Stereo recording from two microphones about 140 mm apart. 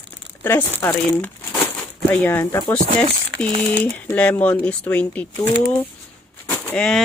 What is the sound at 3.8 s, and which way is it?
Speech, 10° left (ahead or behind).